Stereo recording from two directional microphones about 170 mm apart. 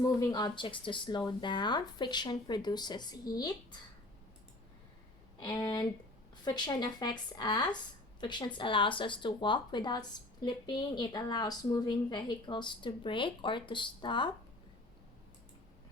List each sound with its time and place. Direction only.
0.0 s a woman's voice: 20° left (ahead or behind)
5.4 s a woman's voice: 25° left (ahead or behind)